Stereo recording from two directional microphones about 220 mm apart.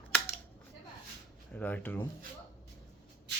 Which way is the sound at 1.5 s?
5° left (ahead or behind).